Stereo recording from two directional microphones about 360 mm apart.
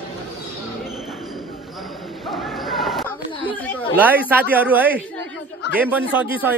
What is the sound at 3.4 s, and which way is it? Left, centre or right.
A woman's voice, centre.